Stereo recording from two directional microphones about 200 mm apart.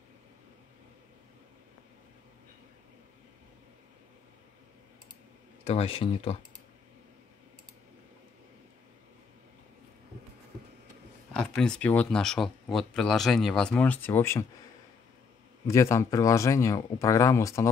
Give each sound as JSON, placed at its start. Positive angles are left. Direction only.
{"t": 5.6, "sound": "speech", "side_deg": 30}
{"t": 11.3, "sound": "speech", "side_deg": 5}
{"t": 15.6, "sound": "speech", "side_deg": 15}